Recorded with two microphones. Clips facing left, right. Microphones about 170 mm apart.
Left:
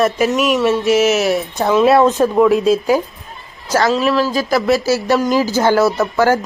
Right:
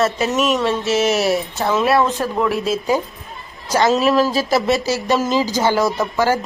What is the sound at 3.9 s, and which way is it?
Speech, 40° right (ahead or behind).